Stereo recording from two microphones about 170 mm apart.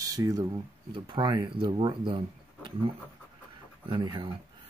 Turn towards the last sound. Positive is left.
turn(degrees=-25)  # may be behind; listen again after turning